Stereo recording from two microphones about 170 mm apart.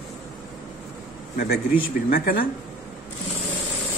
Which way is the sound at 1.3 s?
60° left (ahead or behind).